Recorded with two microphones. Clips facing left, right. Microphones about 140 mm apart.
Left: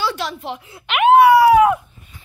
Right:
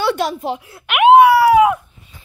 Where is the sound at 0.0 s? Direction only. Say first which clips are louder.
Right 5 dB; 50° right (ahead or behind).